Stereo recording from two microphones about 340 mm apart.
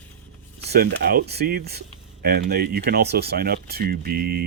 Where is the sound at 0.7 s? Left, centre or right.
Right.